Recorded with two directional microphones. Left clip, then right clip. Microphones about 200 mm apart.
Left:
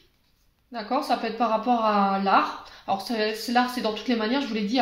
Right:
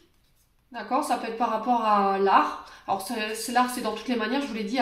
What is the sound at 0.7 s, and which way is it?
Speech, 45° left (ahead or behind).